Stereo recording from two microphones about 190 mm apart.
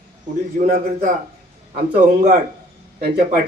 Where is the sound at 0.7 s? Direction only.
45° right (ahead or behind).